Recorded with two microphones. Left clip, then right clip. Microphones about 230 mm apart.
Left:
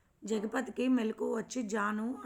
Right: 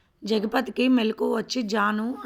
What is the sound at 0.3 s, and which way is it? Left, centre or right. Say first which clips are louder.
A woman's voice: right 10 dB; right.